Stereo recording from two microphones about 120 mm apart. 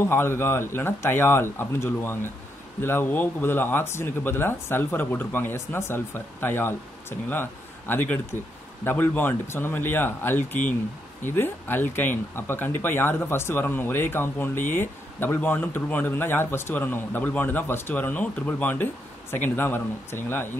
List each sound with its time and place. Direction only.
0.0 s speech: 20° left (ahead or behind)